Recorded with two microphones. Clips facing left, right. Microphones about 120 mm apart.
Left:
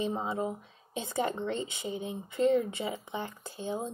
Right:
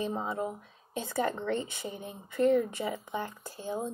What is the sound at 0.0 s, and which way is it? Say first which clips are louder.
Speech: left 1 dB; 20° left (ahead or behind).